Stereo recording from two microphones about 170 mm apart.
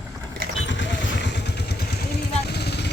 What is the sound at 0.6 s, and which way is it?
Vehicle, 90° left.